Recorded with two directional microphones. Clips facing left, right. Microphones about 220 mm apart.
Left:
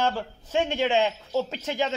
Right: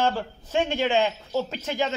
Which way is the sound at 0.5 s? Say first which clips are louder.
Even; 20° left (ahead or behind).